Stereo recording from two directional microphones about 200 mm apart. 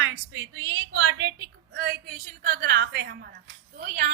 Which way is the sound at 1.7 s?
50° right (ahead or behind).